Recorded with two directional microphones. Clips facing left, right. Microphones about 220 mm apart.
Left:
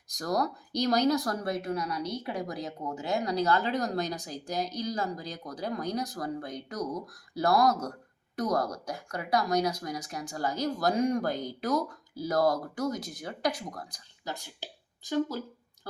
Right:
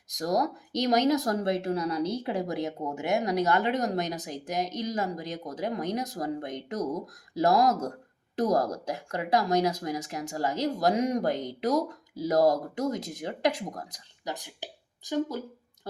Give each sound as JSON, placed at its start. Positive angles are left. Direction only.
{"t": 0.1, "sound": "speech", "side_deg": -20}